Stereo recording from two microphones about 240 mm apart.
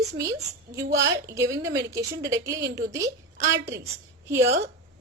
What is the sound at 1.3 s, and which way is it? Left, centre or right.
A woman's voice, centre.